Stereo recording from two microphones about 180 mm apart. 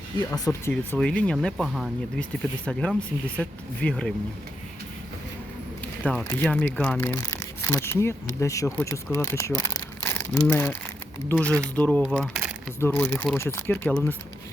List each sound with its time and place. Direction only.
0.3 s speech: 15° left (ahead or behind)
0.7 s speech: 5° left (ahead or behind)
6.1 s speech: 5° left (ahead or behind)
9.1 s crumpling: 15° left (ahead or behind)
11.3 s speech: 10° left (ahead or behind)
12.8 s speech: 15° left (ahead or behind)